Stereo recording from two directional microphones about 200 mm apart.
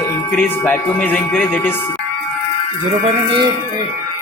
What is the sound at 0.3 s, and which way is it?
Speech, 10° left (ahead or behind).